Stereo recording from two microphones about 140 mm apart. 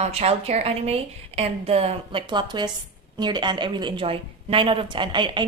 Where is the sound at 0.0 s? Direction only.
50° right (ahead or behind).